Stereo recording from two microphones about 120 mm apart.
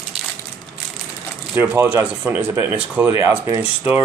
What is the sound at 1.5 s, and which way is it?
Speech, 20° right (ahead or behind).